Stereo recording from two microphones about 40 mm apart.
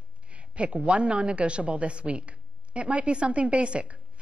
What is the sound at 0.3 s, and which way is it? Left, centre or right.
A woman's voice, right.